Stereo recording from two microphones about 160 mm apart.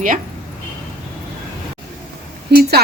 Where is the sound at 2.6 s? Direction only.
85° right.